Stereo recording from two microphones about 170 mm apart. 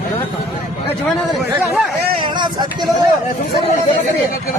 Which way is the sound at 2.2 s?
25° right (ahead or behind).